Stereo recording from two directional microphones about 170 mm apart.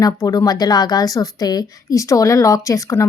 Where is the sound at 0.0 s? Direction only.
20° left (ahead or behind).